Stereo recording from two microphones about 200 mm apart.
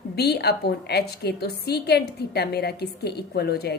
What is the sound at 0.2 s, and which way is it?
A woman's voice, 55° left (ahead or behind).